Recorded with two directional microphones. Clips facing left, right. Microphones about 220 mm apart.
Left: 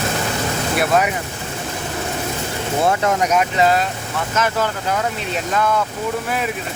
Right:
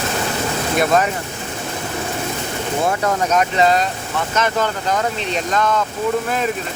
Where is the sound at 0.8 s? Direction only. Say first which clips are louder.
Right 1 dB; 5° left (ahead or behind).